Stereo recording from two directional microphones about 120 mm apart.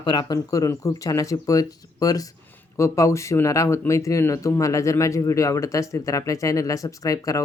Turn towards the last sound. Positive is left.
turn(degrees=30)  # may be behind; listen again after turning